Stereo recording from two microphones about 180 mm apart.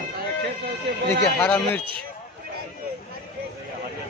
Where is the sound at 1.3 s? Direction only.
10° left (ahead or behind).